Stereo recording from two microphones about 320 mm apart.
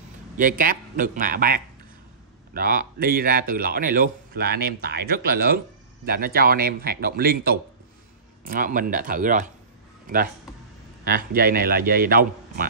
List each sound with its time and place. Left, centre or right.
0.4 s speech: right